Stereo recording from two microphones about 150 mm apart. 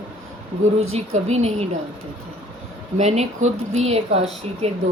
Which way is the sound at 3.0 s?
50° right (ahead or behind).